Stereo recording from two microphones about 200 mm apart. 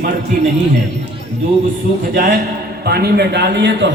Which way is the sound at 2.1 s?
45° right (ahead or behind).